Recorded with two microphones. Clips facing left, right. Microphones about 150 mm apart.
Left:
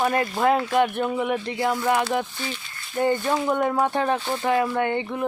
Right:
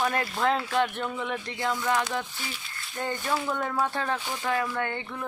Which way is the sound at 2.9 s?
20° left (ahead or behind).